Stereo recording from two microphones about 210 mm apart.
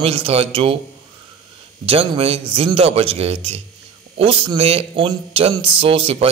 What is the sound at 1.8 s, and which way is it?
A man's voice, 25° right (ahead or behind).